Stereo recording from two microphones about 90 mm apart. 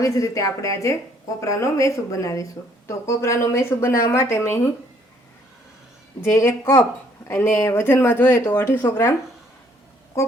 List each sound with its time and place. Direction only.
0.0 s a woman's voice: 40° left (ahead or behind)
6.2 s a woman's voice: 30° left (ahead or behind)
7.3 s speech: 25° left (ahead or behind)
10.1 s quack: 30° left (ahead or behind)